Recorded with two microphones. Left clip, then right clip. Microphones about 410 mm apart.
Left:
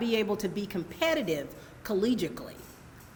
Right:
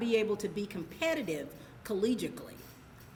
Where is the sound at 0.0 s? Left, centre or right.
Left.